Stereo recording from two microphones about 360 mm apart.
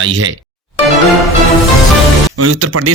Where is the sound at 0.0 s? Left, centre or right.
Right.